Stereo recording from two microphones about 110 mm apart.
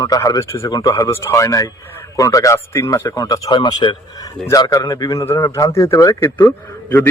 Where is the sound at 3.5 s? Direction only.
45° left (ahead or behind).